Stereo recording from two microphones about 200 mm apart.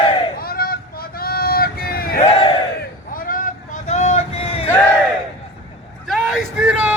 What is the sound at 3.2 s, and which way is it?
Vehicle, 45° left (ahead or behind).